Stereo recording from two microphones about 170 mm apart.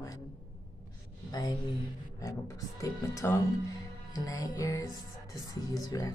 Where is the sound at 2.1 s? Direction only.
20° left (ahead or behind).